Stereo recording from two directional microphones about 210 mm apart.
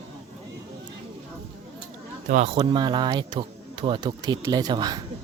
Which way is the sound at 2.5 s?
20° right (ahead or behind).